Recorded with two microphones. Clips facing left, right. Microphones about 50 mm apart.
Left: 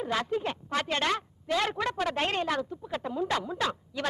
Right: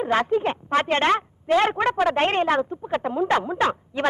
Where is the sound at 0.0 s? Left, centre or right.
Right.